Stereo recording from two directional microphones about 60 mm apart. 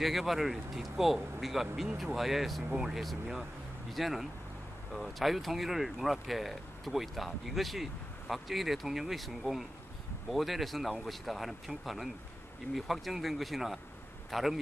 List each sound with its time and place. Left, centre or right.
0.0 s speech: centre